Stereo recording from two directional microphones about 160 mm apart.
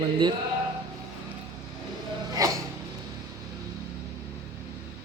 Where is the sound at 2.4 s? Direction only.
20° right (ahead or behind).